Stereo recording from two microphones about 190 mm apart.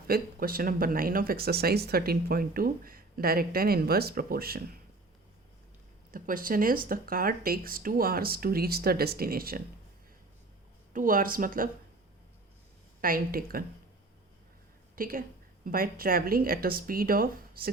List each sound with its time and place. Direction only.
0.1 s speech: 50° right (ahead or behind)
6.1 s speech: 45° right (ahead or behind)
10.9 s speech: 45° right (ahead or behind)
13.0 s speech: 50° right (ahead or behind)
14.9 s a woman's voice: 50° right (ahead or behind)